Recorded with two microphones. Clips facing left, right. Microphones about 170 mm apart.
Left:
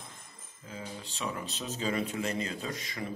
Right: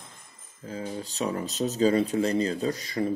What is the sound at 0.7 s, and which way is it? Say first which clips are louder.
Speech: right 8 dB; 40° right (ahead or behind).